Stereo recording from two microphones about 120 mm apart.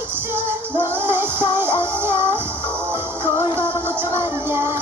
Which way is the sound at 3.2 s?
40° left (ahead or behind).